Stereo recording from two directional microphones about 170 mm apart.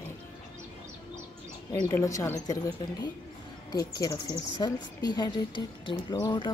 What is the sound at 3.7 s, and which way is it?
Speech, 20° left (ahead or behind).